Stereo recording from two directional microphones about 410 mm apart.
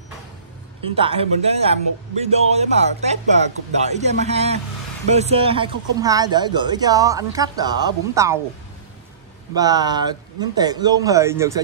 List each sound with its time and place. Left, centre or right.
0.9 s speech: centre
9.6 s speech: centre